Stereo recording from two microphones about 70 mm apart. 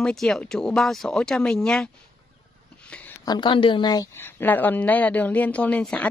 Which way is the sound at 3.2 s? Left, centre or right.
Left.